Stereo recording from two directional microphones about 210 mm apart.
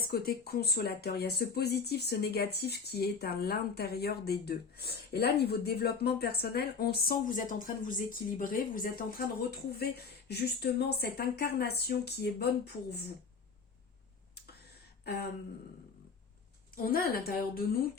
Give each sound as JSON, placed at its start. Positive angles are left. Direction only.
{"t": 0.1, "sound": "speech", "side_deg": 45}
{"t": 15.0, "sound": "a sound", "side_deg": 50}
{"t": 16.7, "sound": "speech", "side_deg": 45}